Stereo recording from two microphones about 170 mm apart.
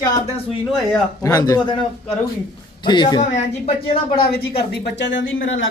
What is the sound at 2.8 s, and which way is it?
Speech, 25° left (ahead or behind).